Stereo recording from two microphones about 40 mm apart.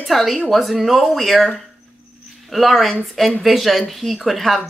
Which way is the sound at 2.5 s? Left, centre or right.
Centre.